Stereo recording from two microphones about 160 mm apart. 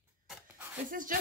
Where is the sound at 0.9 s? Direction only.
60° right (ahead or behind).